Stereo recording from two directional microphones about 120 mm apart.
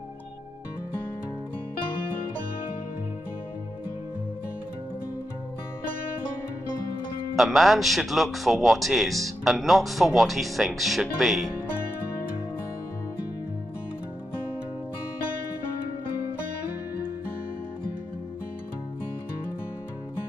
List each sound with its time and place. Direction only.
7.3 s speech: centre (ahead or behind)